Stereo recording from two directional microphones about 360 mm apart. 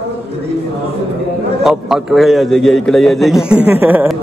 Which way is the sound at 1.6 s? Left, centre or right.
Centre.